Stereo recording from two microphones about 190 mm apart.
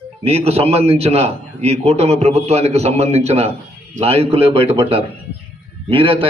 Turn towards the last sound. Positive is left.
turn(degrees=-30)  # may be behind; listen again after turning